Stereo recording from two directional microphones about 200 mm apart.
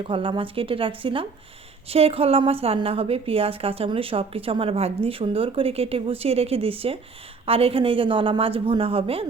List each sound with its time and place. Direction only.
0.0 s a woman's voice: 25° right (ahead or behind)